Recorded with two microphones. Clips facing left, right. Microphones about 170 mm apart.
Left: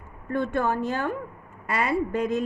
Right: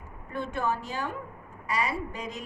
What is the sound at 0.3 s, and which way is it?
A woman's voice, 55° left (ahead or behind).